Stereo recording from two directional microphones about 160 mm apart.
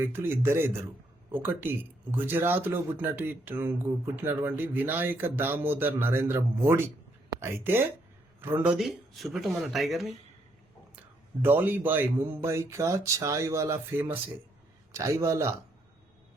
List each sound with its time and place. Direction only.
0.0 s speech: 15° right (ahead or behind)
11.4 s a man's voice: 10° right (ahead or behind)